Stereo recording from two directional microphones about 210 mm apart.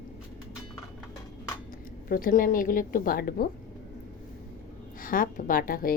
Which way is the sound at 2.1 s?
40° left (ahead or behind).